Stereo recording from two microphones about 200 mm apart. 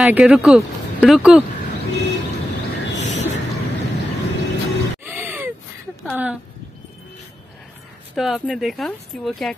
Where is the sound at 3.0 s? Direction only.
35° left (ahead or behind).